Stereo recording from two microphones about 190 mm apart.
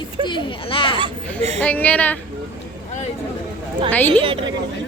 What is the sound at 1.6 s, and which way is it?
Speech, 10° left (ahead or behind).